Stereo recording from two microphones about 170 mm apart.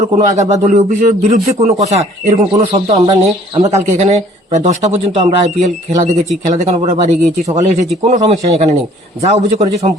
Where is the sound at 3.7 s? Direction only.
40° right (ahead or behind).